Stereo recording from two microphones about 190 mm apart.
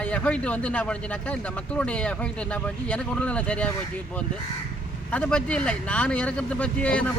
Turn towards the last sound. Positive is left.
turn(degrees=5)  # may be behind; listen again after turning